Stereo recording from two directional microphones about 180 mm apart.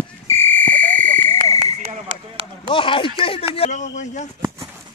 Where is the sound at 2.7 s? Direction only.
30° left (ahead or behind).